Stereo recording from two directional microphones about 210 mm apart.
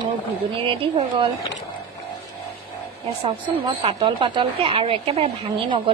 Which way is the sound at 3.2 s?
25° right (ahead or behind).